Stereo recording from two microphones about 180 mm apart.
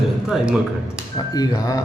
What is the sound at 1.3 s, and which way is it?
Speech, 20° left (ahead or behind).